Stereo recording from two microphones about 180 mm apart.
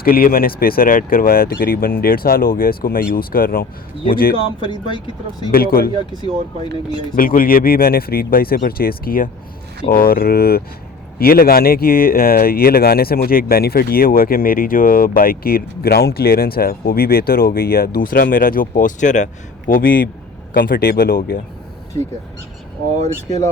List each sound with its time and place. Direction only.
0.0 s speech: 55° left (ahead or behind)
4.6 s speech: 25° left (ahead or behind)
5.5 s speech: 55° left (ahead or behind)
6.0 s speech: 30° right (ahead or behind)
7.2 s speech: 55° left (ahead or behind)
23.0 s speech: 40° right (ahead or behind)